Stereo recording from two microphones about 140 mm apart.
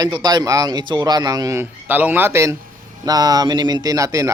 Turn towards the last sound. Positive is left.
turn(degrees=-25)  # may be behind; listen again after turning